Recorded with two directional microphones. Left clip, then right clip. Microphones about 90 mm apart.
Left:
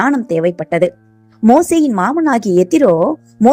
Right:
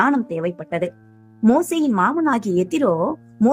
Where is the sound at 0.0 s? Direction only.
40° left (ahead or behind).